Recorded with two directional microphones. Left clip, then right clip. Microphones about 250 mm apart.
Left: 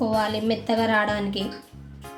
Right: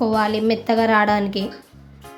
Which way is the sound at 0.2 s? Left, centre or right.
Right.